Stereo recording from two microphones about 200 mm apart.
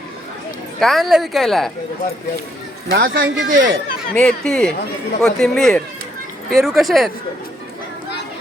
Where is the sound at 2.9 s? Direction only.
70° right (ahead or behind).